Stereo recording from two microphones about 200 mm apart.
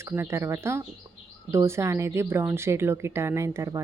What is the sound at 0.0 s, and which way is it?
A woman's voice, 15° right (ahead or behind).